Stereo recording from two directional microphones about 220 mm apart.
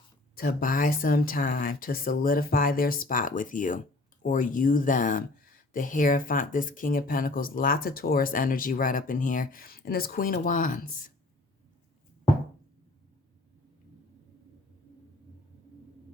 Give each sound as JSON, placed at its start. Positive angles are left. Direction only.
{"t": 0.3, "sound": "speech", "side_deg": 40}